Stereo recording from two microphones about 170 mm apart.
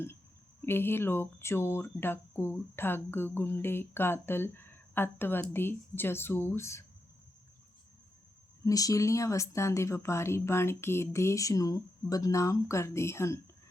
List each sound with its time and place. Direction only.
0.6 s speech: 15° left (ahead or behind)
8.6 s speech: 20° left (ahead or behind)